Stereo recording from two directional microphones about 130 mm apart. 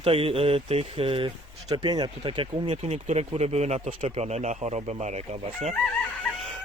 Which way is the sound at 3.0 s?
55° right (ahead or behind).